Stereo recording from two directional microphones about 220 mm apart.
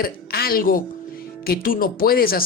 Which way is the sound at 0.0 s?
45° left (ahead or behind).